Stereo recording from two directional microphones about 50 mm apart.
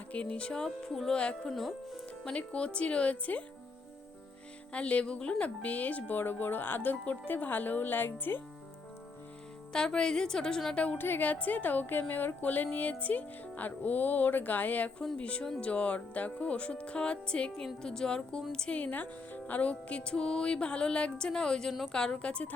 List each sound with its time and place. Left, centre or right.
0.1 s speech: left
1.1 s speech: left
1.5 s speech: centre
2.2 s speech: left
4.7 s speech: left
9.7 s speech: centre
10.9 s speech: left; by 18.4 s centre
18.7 s speech: left